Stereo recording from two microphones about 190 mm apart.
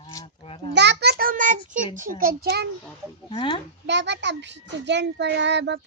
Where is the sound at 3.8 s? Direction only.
65° right (ahead or behind).